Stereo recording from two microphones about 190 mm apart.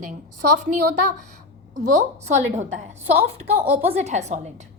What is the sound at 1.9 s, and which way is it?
Speech, 40° right (ahead or behind).